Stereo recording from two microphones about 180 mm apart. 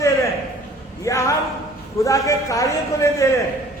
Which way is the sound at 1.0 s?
20° left (ahead or behind).